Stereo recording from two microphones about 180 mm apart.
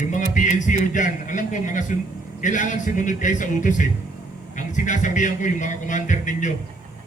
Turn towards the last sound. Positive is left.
turn(degrees=45)  # may be behind; listen again after turning